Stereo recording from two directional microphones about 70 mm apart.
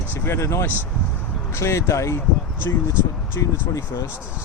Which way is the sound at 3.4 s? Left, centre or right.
Left.